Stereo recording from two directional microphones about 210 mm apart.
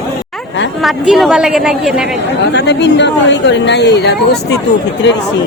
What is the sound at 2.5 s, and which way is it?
Speech, 55° left (ahead or behind).